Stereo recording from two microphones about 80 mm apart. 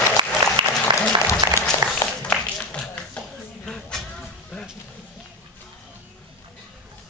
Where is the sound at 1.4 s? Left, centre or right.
Right.